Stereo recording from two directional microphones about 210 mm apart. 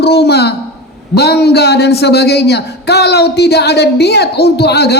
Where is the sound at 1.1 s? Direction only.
50° left (ahead or behind).